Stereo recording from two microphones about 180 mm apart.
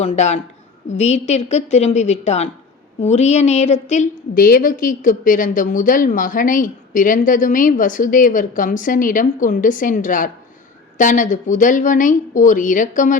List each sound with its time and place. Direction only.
0.0 s a woman's voice: 40° left (ahead or behind)
4.4 s a woman's voice: 55° left (ahead or behind)